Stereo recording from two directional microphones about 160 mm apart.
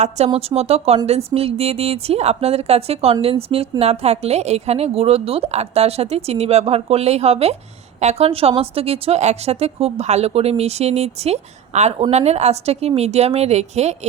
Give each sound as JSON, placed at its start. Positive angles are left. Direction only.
{"t": 0.3, "sound": "speech", "side_deg": -40}